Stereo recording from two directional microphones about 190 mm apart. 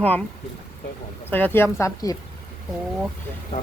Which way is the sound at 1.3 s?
10° left (ahead or behind).